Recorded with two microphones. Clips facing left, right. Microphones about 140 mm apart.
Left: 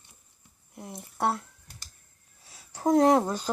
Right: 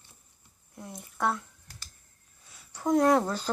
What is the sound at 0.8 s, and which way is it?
Speech, 30° left (ahead or behind).